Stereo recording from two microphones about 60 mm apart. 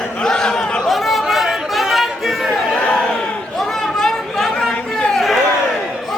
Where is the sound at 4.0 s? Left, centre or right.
Centre.